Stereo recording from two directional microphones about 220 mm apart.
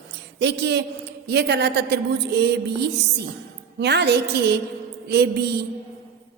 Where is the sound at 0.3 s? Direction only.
50° right (ahead or behind).